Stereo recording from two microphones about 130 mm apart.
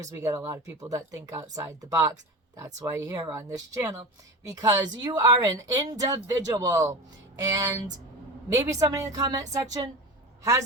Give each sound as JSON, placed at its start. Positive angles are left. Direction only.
{"t": 0.0, "sound": "speech", "side_deg": -25}